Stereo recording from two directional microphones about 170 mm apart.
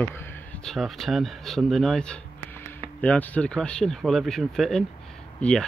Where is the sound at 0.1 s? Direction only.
15° left (ahead or behind).